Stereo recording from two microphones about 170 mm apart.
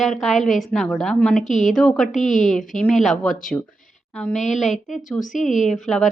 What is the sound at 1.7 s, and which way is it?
Speech, centre (ahead or behind).